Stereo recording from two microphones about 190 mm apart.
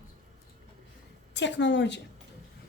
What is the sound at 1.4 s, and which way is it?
Speech, 70° left (ahead or behind).